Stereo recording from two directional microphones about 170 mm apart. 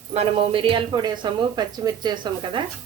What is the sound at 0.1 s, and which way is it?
A woman's voice, 35° right (ahead or behind).